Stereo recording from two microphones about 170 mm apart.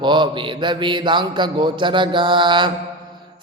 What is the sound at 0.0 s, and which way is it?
Mantra, 25° right (ahead or behind).